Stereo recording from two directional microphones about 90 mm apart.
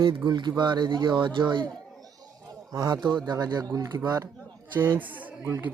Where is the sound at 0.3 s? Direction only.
55° right (ahead or behind).